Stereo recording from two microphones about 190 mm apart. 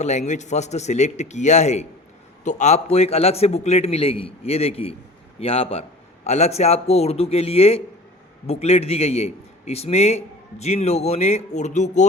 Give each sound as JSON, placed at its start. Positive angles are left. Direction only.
{"t": 0.0, "sound": "a man's voice", "side_deg": 35}